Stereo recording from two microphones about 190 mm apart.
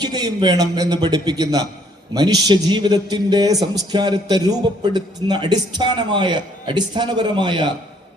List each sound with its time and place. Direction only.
0.0 s a man's voice: 20° right (ahead or behind)